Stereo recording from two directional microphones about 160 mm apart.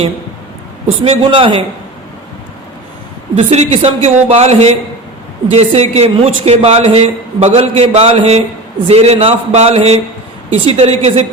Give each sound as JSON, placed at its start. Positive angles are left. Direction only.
{"t": 0.9, "sound": "a man's voice", "side_deg": -35}
{"t": 3.3, "sound": "a man's voice", "side_deg": -40}